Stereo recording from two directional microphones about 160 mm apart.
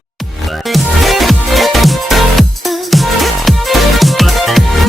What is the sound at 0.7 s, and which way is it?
Music, centre (ahead or behind).